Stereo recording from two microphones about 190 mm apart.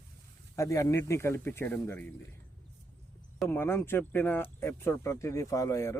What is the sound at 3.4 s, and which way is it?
Speech, 10° left (ahead or behind).